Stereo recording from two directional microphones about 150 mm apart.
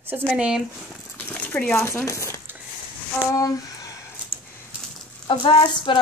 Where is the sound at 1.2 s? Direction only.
10° left (ahead or behind).